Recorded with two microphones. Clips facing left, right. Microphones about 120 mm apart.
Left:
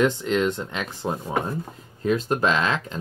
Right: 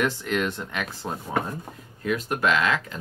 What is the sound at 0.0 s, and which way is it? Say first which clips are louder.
Speech: left 4 dB; 20° left (ahead or behind).